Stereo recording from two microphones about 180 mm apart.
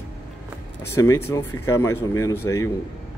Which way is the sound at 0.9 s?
15° left (ahead or behind).